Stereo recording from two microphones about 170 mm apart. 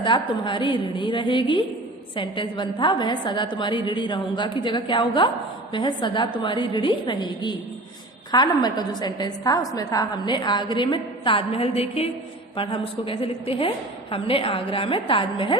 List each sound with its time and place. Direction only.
0.0 s a woman's voice: 30° left (ahead or behind)